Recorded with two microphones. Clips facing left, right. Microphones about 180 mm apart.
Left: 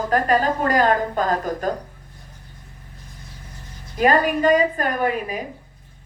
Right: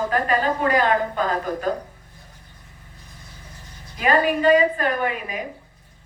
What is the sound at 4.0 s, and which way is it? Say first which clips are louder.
Speech: left 2 dB; 40° left (ahead or behind).